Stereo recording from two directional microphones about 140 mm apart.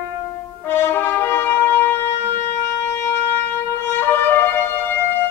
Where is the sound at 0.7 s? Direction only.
15° left (ahead or behind).